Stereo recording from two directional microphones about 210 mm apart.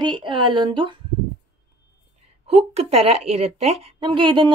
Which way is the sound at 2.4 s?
30° right (ahead or behind).